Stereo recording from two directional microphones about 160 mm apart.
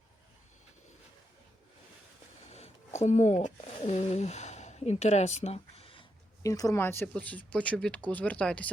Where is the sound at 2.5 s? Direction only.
45° left (ahead or behind).